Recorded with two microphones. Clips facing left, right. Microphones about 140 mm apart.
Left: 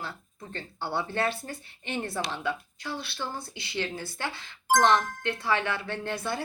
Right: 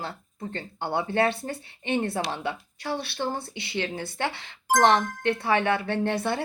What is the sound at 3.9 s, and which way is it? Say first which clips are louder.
Speech: right 5 dB; 55° right (ahead or behind).